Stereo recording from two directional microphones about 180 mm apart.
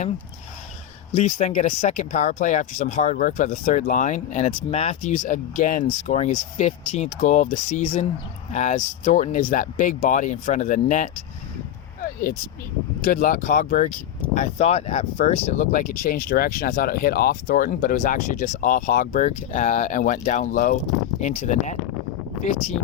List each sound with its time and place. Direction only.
1.1 s speech: 40° left (ahead or behind)
13.0 s speech: 50° left (ahead or behind)